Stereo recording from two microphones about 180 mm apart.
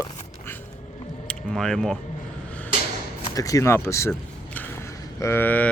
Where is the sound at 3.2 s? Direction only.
20° left (ahead or behind).